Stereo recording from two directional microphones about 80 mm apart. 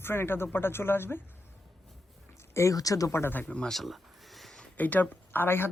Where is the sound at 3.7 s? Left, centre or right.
Centre.